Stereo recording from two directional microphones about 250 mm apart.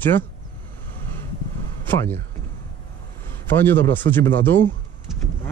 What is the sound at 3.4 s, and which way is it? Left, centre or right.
Speech, centre.